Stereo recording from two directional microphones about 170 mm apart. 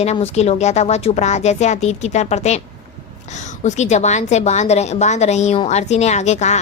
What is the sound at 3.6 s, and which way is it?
A woman's voice, 40° left (ahead or behind).